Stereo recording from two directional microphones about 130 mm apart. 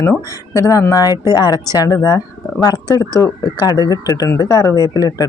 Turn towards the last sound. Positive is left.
turn(degrees=30)  # may be behind; listen again after turning